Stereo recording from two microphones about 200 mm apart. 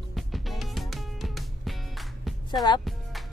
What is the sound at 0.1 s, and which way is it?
Music, centre (ahead or behind).